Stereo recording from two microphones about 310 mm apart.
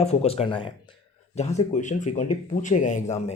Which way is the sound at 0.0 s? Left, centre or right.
Centre.